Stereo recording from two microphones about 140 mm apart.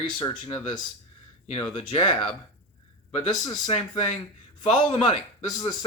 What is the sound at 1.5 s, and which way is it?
Speech, 45° left (ahead or behind).